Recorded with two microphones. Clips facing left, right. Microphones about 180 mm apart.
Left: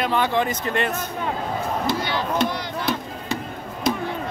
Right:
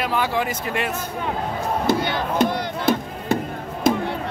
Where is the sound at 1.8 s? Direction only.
50° right (ahead or behind).